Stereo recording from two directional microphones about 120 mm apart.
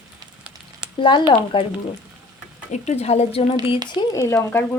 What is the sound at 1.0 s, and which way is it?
Speech, 40° left (ahead or behind).